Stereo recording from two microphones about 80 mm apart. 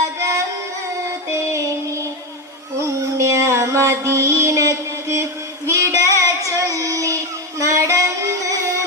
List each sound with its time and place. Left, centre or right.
0.2 s singing: right
1.3 s music: right